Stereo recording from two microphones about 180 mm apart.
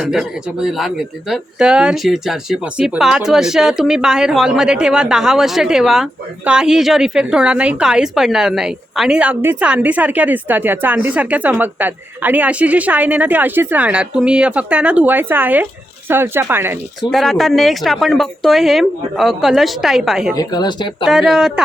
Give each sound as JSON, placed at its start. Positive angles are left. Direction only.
{"t": 0.0, "sound": "speech", "side_deg": -5}
{"t": 17.1, "sound": "speech", "side_deg": 0}
{"t": 20.3, "sound": "speech", "side_deg": 20}
{"t": 21.0, "sound": "speech", "side_deg": 0}